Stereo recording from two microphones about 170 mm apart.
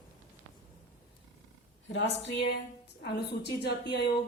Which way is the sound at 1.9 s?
90° left.